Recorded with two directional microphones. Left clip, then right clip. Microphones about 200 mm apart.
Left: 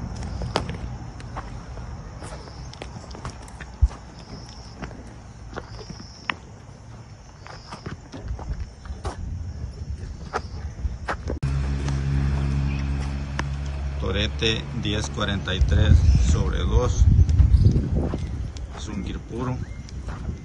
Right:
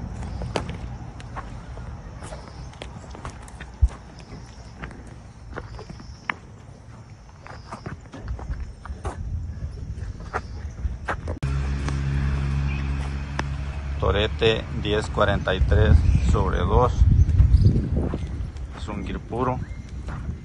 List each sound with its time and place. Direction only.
0.1 s walk: centre (ahead or behind)
1.3 s a sound: centre (ahead or behind)
6.3 s walk: 5° left (ahead or behind)
11.1 s a sound: centre (ahead or behind)
11.4 s music: 50° left (ahead or behind)
14.0 s a sound: 5° right (ahead or behind)
14.8 s speech: 5° right (ahead or behind)
17.4 s clip-clop: 5° left (ahead or behind)
18.8 s speech: centre (ahead or behind)